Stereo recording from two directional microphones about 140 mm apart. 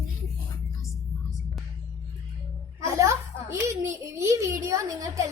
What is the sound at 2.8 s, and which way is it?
A woman's voice, 20° right (ahead or behind).